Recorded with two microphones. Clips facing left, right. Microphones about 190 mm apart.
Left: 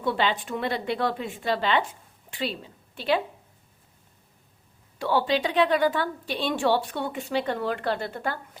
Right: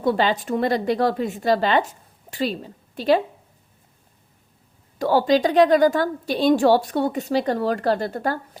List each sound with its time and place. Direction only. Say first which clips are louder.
0.0 s a woman's voice: right 5 dB; 40° right (ahead or behind)
4.9 s a woman's voice: right 6 dB; 40° right (ahead or behind)